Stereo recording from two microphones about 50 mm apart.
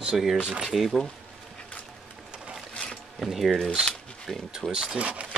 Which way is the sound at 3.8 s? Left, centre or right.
Centre.